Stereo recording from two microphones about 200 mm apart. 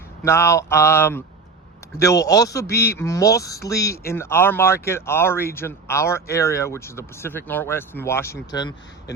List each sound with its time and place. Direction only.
0.3 s speech: 15° left (ahead or behind)